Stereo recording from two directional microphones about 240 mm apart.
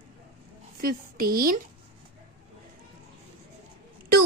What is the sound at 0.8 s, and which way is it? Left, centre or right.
Speech, right.